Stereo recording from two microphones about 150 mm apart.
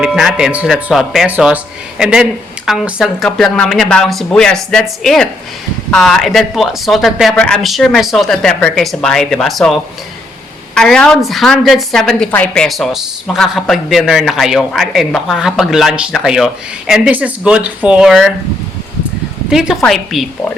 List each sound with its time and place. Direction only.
0.0 s a woman's voice: 5° right (ahead or behind)
19.5 s a woman's voice: 5° right (ahead or behind)